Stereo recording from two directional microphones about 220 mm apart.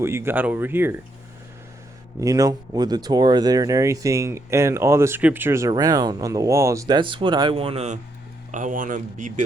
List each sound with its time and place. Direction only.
0.0 s speech: 10° right (ahead or behind)
2.2 s speech: 15° right (ahead or behind)
8.5 s speech: 35° right (ahead or behind)